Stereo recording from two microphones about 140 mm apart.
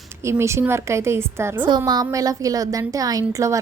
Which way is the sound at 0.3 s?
20° right (ahead or behind).